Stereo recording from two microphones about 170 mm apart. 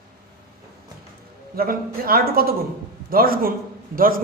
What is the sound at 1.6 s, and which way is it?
A man's voice, 60° right (ahead or behind).